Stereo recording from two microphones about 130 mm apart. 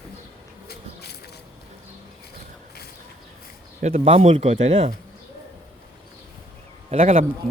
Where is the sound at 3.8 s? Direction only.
60° right (ahead or behind).